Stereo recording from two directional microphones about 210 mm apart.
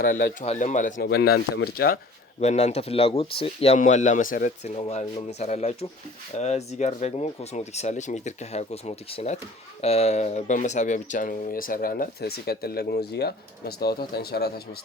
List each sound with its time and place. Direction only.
0.0 s speech: 40° left (ahead or behind)
0.9 s speech: 50° left (ahead or behind)
2.4 s speech: 30° left (ahead or behind); by 14.8 s 50° left (ahead or behind)